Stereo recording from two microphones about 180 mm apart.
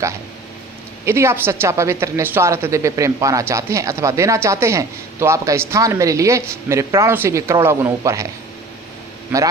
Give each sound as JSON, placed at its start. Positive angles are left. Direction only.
{"t": 1.0, "sound": "a woman's voice", "side_deg": -15}
{"t": 9.3, "sound": "a woman's voice", "side_deg": -10}